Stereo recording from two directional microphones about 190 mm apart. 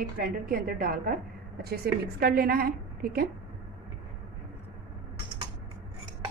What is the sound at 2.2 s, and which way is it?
A woman's voice, 50° right (ahead or behind).